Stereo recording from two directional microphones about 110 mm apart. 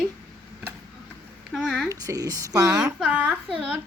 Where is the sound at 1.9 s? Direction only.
35° right (ahead or behind).